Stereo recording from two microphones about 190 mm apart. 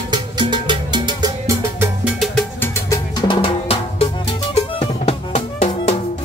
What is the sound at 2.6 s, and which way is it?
Music, 15° left (ahead or behind).